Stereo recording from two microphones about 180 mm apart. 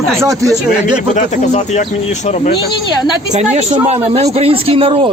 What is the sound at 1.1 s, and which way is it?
Speech, 40° left (ahead or behind).